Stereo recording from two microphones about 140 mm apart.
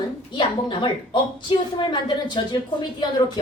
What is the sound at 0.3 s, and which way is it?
Speech, 35° left (ahead or behind).